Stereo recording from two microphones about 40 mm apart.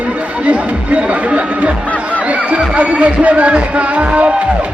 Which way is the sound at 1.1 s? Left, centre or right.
Right.